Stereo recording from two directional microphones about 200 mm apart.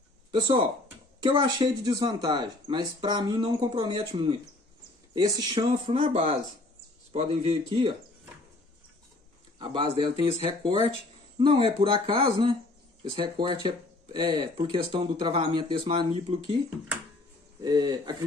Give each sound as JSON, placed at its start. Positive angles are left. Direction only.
{"t": 0.3, "sound": "speech", "side_deg": -25}
{"t": 9.6, "sound": "speech", "side_deg": -25}
{"t": 17.6, "sound": "speech", "side_deg": -20}